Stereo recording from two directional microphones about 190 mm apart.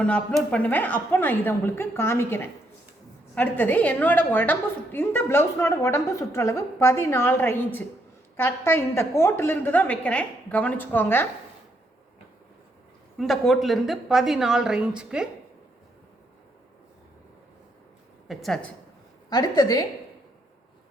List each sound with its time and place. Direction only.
0.0 s a woman's voice: 5° left (ahead or behind)
13.1 s a woman's voice: centre (ahead or behind)
18.3 s a woman's voice: centre (ahead or behind)
19.3 s a woman's voice: 20° left (ahead or behind)